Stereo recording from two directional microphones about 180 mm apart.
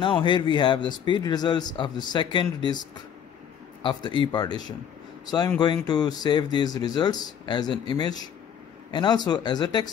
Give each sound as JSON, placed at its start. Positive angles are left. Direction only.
{"t": 0.0, "sound": "speech", "side_deg": 25}
{"t": 3.8, "sound": "speech", "side_deg": 25}